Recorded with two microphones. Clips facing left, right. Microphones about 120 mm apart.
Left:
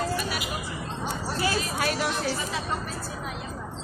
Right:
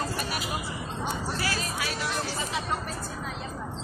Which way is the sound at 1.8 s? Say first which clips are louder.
Left 6 dB; 50° left (ahead or behind).